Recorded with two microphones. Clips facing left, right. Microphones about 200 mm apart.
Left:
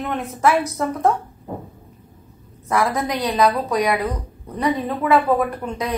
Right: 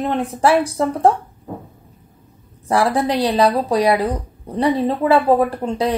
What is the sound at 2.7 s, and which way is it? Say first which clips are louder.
A woman's voice: right 4 dB; 30° right (ahead or behind).